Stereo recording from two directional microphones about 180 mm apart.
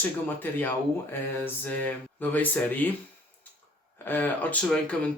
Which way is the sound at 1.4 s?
10° left (ahead or behind).